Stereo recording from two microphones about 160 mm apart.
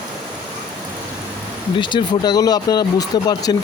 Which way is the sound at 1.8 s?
30° left (ahead or behind).